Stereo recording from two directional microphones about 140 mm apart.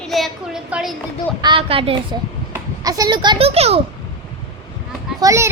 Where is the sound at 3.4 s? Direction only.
45° right (ahead or behind).